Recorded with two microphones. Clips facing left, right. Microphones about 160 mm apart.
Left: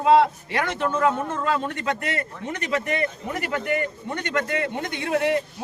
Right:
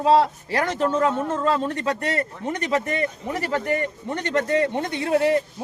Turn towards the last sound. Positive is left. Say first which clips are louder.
# right 3 dB
turn(degrees=-30)  # may be behind; listen again after turning